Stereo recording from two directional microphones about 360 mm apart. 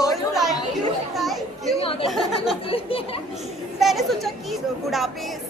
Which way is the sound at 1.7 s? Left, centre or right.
Centre.